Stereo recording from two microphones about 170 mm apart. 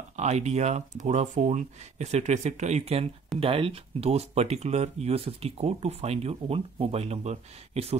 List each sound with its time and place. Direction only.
0.1 s speech: 40° right (ahead or behind)